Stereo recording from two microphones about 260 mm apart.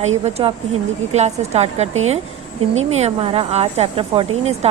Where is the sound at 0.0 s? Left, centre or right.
Right.